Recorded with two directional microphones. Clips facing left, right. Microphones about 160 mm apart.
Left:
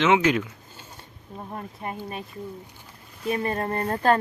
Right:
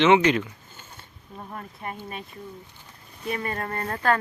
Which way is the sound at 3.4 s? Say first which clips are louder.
Left 4 dB; 25° left (ahead or behind).